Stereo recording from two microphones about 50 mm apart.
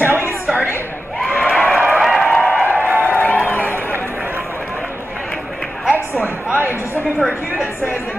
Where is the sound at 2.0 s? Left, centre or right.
Centre.